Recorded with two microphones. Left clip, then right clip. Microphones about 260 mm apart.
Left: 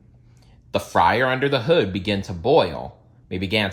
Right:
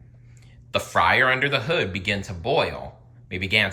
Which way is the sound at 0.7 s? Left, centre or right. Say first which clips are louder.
Left 2 dB; centre.